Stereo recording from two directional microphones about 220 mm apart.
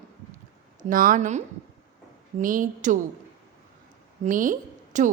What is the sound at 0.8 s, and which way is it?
Speech, 40° right (ahead or behind).